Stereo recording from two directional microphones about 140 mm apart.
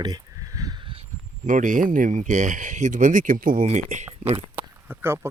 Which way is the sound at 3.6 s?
55° right (ahead or behind).